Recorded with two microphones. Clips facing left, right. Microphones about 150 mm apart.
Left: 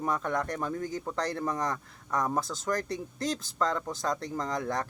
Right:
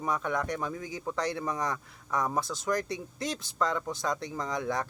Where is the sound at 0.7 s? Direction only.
50° left (ahead or behind).